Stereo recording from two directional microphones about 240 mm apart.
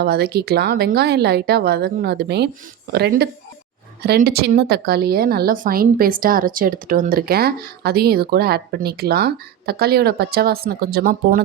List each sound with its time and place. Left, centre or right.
0.0 s a woman's voice: right